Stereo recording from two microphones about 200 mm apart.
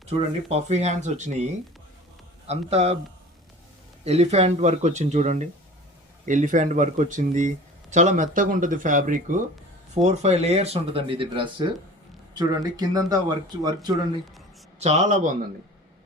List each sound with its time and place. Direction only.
0.0 s speech: 30° right (ahead or behind)
2.5 s speech: 30° right (ahead or behind)
4.0 s speech: 30° right (ahead or behind)
14.8 s speech: 35° right (ahead or behind)